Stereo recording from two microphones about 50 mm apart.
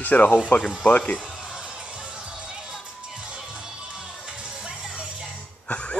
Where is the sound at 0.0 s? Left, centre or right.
Left.